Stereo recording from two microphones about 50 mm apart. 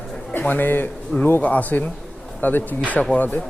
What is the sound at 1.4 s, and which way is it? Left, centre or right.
A man's voice, left.